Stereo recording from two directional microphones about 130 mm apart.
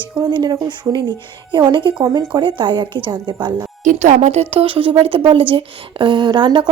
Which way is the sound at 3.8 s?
75° right (ahead or behind).